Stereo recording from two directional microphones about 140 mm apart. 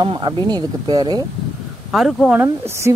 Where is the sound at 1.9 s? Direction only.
Centre (ahead or behind).